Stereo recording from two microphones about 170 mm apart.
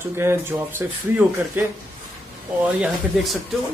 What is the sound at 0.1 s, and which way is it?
A man's voice, 15° right (ahead or behind).